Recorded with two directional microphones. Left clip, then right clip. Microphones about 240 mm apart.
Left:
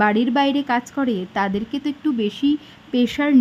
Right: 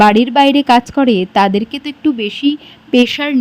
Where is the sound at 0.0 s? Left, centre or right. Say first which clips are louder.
Right 9 dB; centre.